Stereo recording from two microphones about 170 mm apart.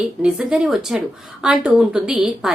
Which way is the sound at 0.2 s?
5° right (ahead or behind).